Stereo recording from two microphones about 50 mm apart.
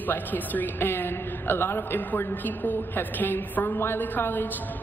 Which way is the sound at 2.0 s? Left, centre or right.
Left.